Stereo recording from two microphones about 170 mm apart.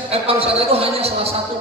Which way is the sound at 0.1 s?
35° right (ahead or behind).